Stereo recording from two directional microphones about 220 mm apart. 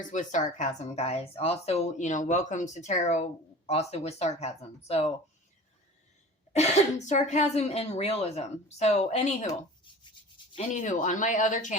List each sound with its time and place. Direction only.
0.1 s a woman's voice: 35° left (ahead or behind)
6.5 s speech: 30° left (ahead or behind)
9.5 s rub: 20° left (ahead or behind)